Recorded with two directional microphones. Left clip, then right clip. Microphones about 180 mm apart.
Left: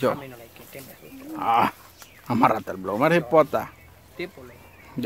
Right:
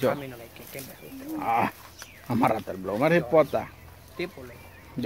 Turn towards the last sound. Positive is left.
turn(degrees=0)  # may be behind; listen again after turning